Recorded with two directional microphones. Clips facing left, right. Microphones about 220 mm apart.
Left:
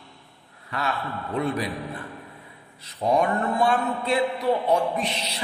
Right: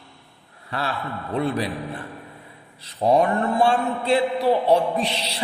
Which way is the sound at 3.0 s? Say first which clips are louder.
Right 3 dB; 30° right (ahead or behind).